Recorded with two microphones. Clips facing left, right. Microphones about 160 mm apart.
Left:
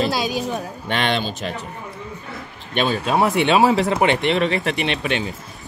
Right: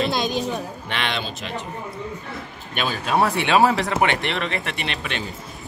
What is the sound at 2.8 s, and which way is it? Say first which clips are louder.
Speech: left 4 dB; 35° left (ahead or behind).